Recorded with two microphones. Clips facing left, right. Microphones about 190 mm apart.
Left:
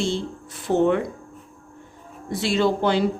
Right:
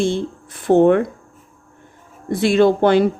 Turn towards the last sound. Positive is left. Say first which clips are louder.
# right 7 dB
turn(degrees=-55)  # may be behind; listen again after turning